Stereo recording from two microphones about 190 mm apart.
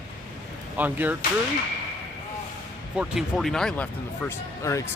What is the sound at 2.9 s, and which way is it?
Speech, centre (ahead or behind).